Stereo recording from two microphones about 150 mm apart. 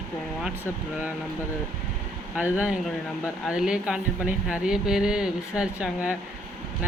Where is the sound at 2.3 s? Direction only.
10° right (ahead or behind).